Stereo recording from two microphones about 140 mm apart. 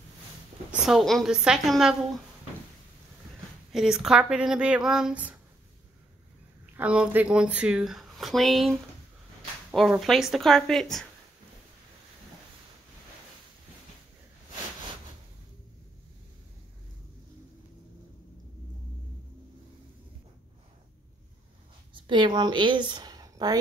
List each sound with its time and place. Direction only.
0.8 s speech: centre (ahead or behind)
3.7 s speech: 5° right (ahead or behind)
6.6 s speech: 10° right (ahead or behind)
21.9 s a woman's voice: 35° right (ahead or behind)